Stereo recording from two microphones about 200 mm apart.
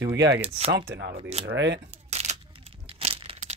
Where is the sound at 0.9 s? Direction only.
60° right (ahead or behind).